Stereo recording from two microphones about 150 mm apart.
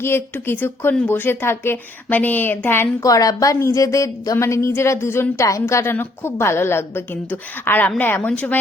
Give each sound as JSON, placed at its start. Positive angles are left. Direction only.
{"t": 0.0, "sound": "speech", "side_deg": 15}